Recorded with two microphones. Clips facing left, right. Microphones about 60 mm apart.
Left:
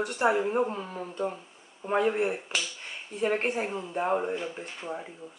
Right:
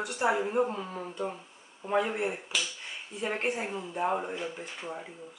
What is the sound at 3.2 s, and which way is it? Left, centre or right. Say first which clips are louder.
Speech: left 4 dB; left.